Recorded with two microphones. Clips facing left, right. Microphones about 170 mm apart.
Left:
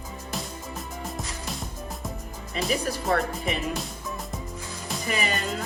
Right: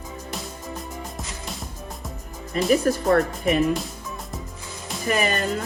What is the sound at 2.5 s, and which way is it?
Speech, 50° right (ahead or behind).